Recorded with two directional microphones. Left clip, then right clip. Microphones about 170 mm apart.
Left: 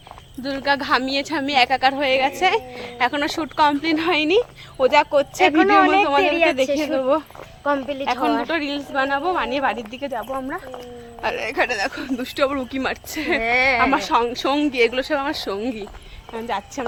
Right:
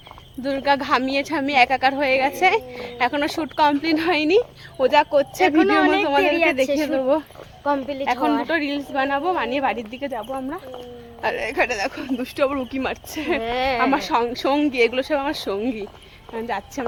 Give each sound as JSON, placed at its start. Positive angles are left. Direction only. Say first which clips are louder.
{"t": 0.4, "sound": "a woman's voice", "louder": "right 1 dB", "side_deg": -15}
{"t": 7.0, "sound": "a woman's voice", "louder": "left 1 dB", "side_deg": -15}
{"t": 7.6, "sound": "speech", "louder": "left 1 dB", "side_deg": 0}
{"t": 8.0, "sound": "a woman's voice", "louder": "even", "side_deg": -15}